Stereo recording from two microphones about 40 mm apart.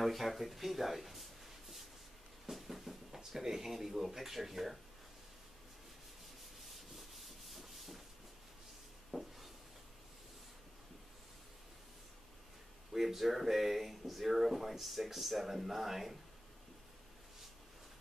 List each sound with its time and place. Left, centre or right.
0.0 s speech: centre
2.5 s a sound: centre
3.2 s speech: centre
7.0 s rub: centre
9.1 s a sound: centre
12.9 s speech: centre